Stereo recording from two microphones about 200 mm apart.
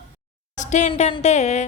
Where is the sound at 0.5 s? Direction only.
35° left (ahead or behind).